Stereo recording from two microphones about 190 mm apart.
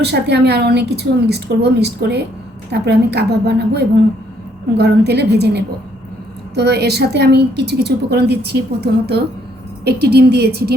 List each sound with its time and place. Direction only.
0.0 s a woman's voice: 60° right (ahead or behind)